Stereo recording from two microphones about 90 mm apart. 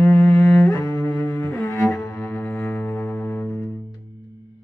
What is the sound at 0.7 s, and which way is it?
Cello, 35° left (ahead or behind).